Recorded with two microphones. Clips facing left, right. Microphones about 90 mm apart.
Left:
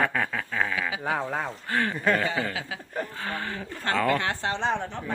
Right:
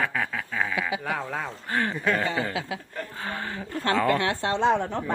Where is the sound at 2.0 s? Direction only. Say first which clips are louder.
Left 3 dB; centre (ahead or behind).